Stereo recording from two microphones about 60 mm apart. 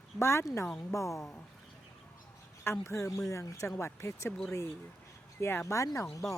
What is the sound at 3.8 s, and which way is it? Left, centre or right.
Speech, left.